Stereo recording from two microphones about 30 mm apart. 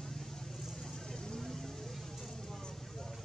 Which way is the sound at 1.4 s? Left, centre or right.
Centre.